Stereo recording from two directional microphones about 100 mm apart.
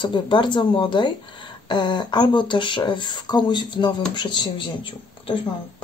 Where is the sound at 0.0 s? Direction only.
50° left (ahead or behind).